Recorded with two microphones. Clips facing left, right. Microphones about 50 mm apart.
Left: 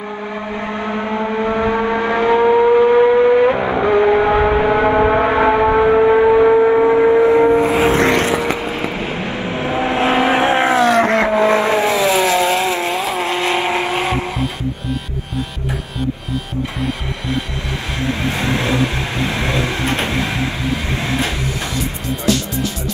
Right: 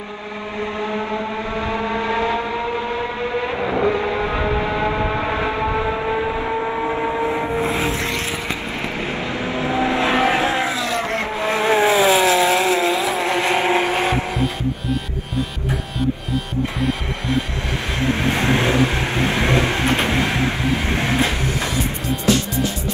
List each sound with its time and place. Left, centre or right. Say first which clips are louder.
0.8 s vehicle: left 3 dB; left
3.7 s a sound: left 6 dB; left
5.9 s gong: left 11 dB; left
6.5 s a sound: left 10 dB; left
7.5 s vehicle: left 7 dB; centre
7.8 s vehicle: left 9 dB; left
12.3 s vehicle: left 1 dB; centre
12.9 s vehicle: even; left
13.8 s vehicle: even; centre
18.1 s vehicle: right 1 dB; right